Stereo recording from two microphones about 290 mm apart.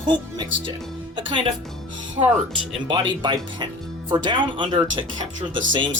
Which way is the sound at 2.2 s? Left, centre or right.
Centre.